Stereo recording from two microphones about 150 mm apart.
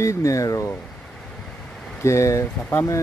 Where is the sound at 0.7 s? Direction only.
5° left (ahead or behind).